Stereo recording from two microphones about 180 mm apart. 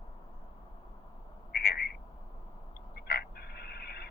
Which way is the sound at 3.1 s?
60° left (ahead or behind).